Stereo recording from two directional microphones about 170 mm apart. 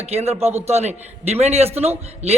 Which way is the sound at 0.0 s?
35° right (ahead or behind).